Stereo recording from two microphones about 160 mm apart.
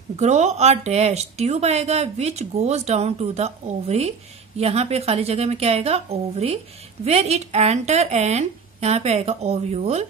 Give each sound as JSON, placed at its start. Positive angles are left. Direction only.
{"t": 0.2, "sound": "a woman's voice", "side_deg": -45}